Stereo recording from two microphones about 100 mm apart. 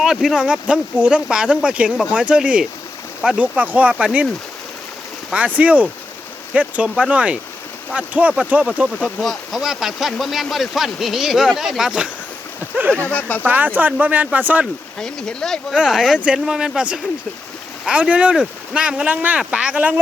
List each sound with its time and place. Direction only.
0.0 s speech: 5° right (ahead or behind)
5.3 s speech: 15° right (ahead or behind)
9.0 s speech: 5° left (ahead or behind)
13.1 s speech: 15° left (ahead or behind)
13.5 s speech: 15° right (ahead or behind)
14.9 s speech: 5° left (ahead or behind)
15.7 s speech: 5° right (ahead or behind)